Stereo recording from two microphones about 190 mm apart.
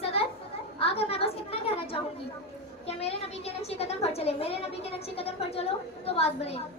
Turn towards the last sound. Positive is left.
turn(degrees=30)  # may be behind; listen again after turning